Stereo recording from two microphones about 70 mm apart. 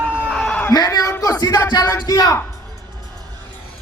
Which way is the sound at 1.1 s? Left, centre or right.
Left.